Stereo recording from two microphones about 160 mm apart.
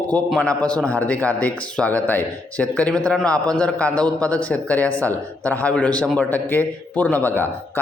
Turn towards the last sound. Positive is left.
turn(degrees=10)  # may be behind; listen again after turning